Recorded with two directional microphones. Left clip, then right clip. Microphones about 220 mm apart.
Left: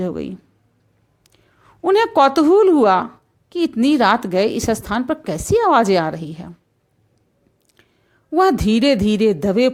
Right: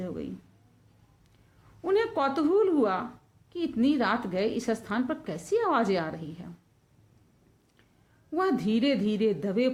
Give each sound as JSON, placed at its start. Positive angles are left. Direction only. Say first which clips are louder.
{"t": 0.0, "sound": "speech", "louder": "left 12 dB", "side_deg": 45}
{"t": 1.8, "sound": "a woman's voice", "louder": "left 13 dB", "side_deg": 45}
{"t": 8.3, "sound": "a woman's voice", "louder": "left 12 dB", "side_deg": 40}